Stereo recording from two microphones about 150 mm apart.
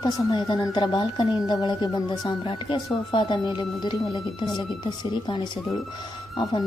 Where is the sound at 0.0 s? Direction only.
25° left (ahead or behind).